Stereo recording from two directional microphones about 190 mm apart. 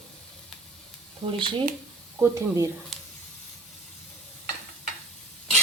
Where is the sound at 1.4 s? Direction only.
25° right (ahead or behind).